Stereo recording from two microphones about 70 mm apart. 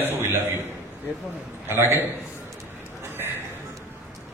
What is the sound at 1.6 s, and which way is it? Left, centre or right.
Speech, right.